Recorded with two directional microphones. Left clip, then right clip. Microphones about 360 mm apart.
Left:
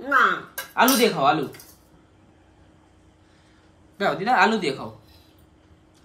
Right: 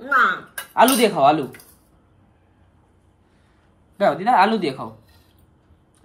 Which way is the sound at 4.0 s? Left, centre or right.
Centre.